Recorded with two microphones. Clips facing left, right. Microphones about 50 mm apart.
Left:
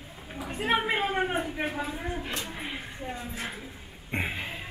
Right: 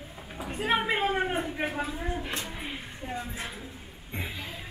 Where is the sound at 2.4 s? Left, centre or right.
Centre.